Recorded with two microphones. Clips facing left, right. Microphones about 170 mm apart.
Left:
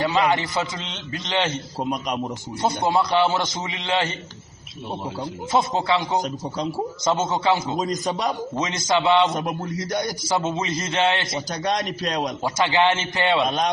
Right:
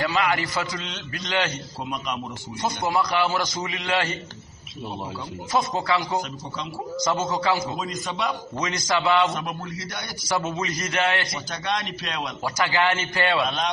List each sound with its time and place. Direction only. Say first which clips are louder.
0.0 s a man's voice: left 3 dB; 25° left (ahead or behind)
2.6 s a man's voice: left 3 dB; 25° left (ahead or behind)
5.5 s a man's voice: left 2 dB; 25° left (ahead or behind)
7.7 s a man's voice: left 6 dB; 40° left (ahead or behind)
8.5 s a man's voice: left 2 dB; 25° left (ahead or behind)
9.3 s a man's voice: left 4 dB; 40° left (ahead or behind)
10.2 s a man's voice: left 2 dB; 25° left (ahead or behind)
11.6 s a man's voice: left 4 dB; 40° left (ahead or behind)
12.4 s a man's voice: left 3 dB; 25° left (ahead or behind)